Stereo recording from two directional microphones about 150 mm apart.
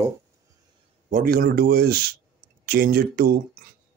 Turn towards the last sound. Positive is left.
turn(degrees=-85)